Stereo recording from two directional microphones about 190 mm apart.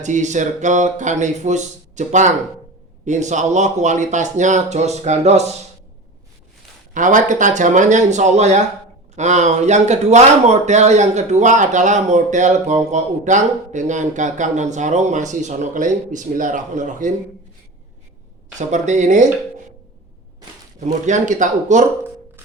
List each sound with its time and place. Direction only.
0.0 s speech: 40° right (ahead or behind)
6.9 s speech: 40° right (ahead or behind)
18.7 s speech: 40° right (ahead or behind)
20.7 s speech: 40° right (ahead or behind)